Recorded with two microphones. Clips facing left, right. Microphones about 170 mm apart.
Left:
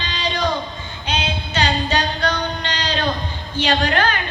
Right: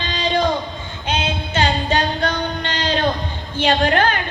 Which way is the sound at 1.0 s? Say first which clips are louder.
Right 2 dB; 50° right (ahead or behind).